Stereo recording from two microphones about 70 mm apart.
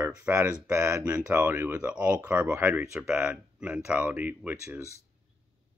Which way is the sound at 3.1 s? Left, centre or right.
Centre.